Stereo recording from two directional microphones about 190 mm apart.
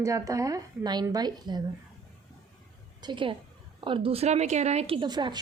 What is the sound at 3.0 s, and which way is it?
A woman's voice, 25° right (ahead or behind).